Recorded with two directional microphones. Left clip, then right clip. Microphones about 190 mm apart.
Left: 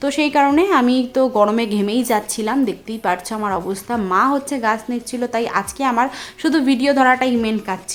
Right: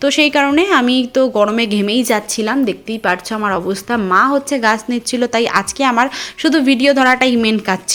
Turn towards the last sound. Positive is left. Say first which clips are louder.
# right 5 dB
turn(degrees=-20)  # may be behind; listen again after turning